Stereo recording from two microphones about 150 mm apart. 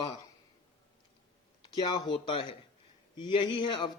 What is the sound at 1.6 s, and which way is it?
Speech, 30° left (ahead or behind).